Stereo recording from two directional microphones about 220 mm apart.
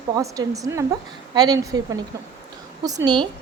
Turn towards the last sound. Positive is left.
turn(degrees=-20)  # may be behind; listen again after turning